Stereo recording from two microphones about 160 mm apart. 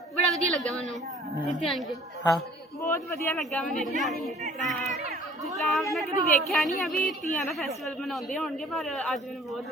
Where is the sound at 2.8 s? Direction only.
15° left (ahead or behind).